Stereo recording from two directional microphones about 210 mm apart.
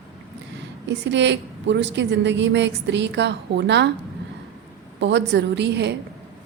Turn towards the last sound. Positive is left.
turn(degrees=-55)  # may be behind; listen again after turning